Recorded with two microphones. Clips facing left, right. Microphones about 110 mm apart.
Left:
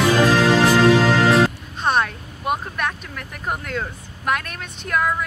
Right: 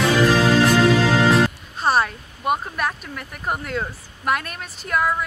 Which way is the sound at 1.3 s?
Centre (ahead or behind).